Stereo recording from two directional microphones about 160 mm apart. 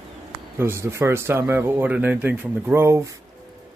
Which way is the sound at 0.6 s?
15° right (ahead or behind).